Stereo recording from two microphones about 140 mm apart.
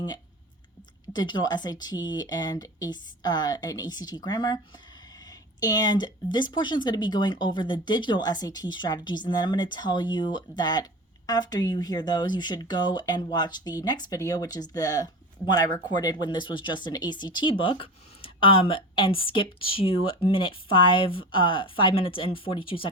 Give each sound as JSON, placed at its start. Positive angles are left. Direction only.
{"t": 1.1, "sound": "speech", "side_deg": 30}